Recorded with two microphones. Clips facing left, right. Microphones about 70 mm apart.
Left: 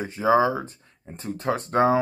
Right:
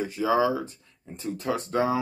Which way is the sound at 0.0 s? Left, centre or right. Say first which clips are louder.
Left 3 dB; left.